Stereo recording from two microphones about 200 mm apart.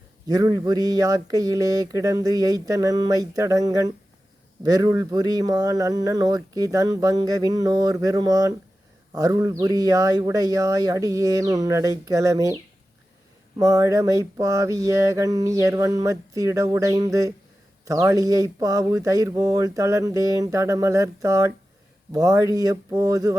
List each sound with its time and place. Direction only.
0.3 s speech: 15° right (ahead or behind)
13.6 s speech: 15° right (ahead or behind)